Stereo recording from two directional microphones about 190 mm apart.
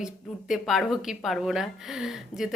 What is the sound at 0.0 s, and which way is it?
Speech, centre (ahead or behind).